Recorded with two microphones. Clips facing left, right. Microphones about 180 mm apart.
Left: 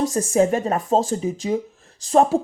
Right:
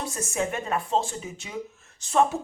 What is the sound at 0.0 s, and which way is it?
Speech, 35° left (ahead or behind).